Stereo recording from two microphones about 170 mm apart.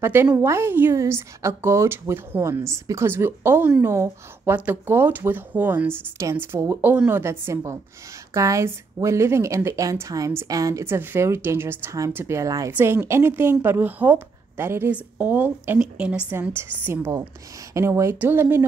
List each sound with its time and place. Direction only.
0.0 s a woman's voice: 15° right (ahead or behind)